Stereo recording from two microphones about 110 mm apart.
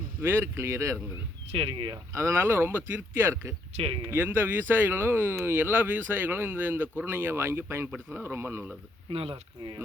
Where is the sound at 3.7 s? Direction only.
60° right (ahead or behind).